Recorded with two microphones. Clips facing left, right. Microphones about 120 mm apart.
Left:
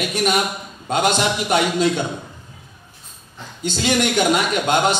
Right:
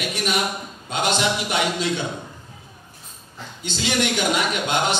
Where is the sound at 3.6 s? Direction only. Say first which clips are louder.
Left 4 dB; 45° left (ahead or behind).